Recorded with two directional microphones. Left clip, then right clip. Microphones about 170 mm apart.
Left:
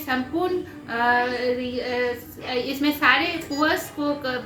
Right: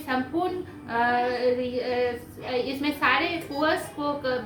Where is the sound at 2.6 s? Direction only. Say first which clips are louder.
Left 6 dB; 20° left (ahead or behind).